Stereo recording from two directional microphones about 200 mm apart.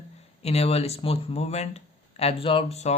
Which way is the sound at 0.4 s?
30° left (ahead or behind).